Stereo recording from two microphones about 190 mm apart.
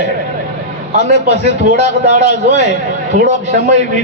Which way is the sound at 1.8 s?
35° right (ahead or behind).